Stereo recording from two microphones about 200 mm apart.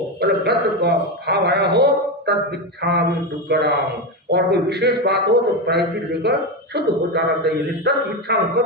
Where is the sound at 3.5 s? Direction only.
55° right (ahead or behind).